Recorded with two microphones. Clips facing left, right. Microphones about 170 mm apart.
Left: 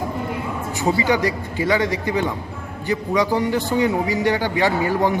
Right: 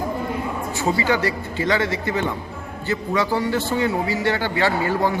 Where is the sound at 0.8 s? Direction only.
15° left (ahead or behind).